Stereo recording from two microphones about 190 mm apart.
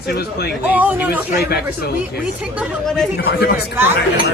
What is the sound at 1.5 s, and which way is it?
Speech, 55° left (ahead or behind).